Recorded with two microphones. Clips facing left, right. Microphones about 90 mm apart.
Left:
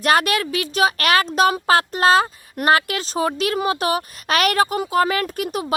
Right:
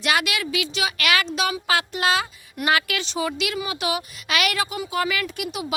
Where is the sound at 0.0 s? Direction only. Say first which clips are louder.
Left 6 dB; 45° left (ahead or behind).